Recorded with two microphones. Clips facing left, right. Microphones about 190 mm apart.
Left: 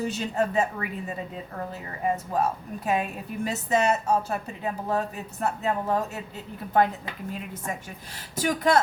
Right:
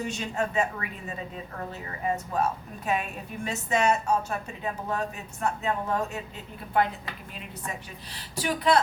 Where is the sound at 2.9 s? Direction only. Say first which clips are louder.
Left 2 dB; 35° left (ahead or behind).